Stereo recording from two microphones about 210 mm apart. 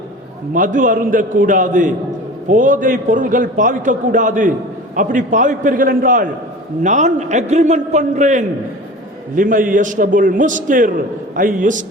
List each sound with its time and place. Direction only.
0.5 s a man's voice: 40° right (ahead or behind)